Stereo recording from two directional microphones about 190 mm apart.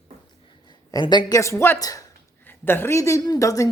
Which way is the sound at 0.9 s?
20° left (ahead or behind).